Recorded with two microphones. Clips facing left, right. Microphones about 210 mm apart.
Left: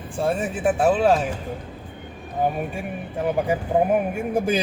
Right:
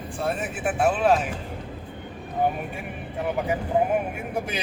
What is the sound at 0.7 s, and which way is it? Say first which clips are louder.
Speech: left 4 dB; 40° left (ahead or behind).